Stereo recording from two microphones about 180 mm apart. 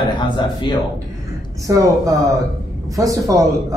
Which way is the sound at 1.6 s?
20° right (ahead or behind).